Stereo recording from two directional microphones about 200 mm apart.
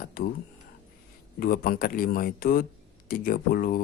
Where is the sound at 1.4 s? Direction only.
45° left (ahead or behind).